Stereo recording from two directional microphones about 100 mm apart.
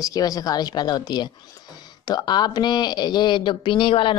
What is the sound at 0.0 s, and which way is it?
Speech, 35° left (ahead or behind).